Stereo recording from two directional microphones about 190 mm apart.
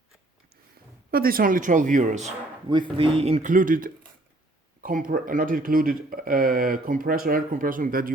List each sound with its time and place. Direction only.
1.1 s speech: 50° right (ahead or behind)
2.7 s speech: 25° right (ahead or behind); by 8.1 s 45° right (ahead or behind)